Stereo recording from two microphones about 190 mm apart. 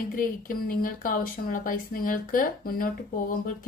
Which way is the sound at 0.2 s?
45° left (ahead or behind).